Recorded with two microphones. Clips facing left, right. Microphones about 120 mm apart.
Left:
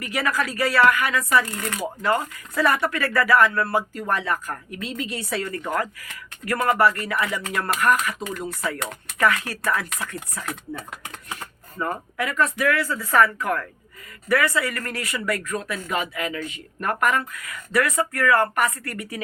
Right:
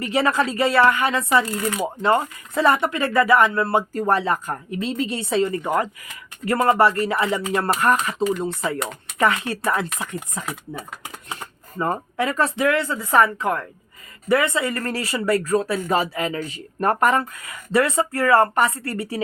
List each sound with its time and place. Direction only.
0.0 s speech: 25° right (ahead or behind)
1.5 s speech: 10° right (ahead or behind)
1.8 s speech: 25° right (ahead or behind)
10.4 s speech: 5° right (ahead or behind)
11.8 s speech: 30° right (ahead or behind)